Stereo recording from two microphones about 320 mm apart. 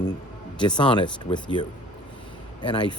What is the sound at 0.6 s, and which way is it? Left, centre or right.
Speech, centre.